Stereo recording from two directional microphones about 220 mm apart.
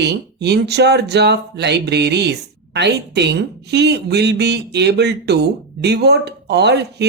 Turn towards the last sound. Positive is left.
turn(degrees=-50)  # may be behind; listen again after turning